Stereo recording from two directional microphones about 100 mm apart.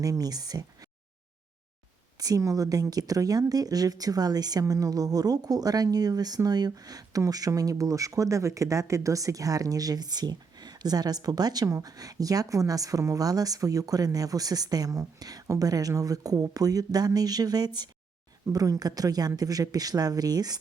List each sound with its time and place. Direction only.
0.0 s speech: 40° right (ahead or behind)
2.1 s speech: 40° right (ahead or behind)